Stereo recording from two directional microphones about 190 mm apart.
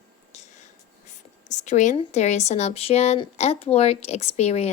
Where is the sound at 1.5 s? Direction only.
40° left (ahead or behind).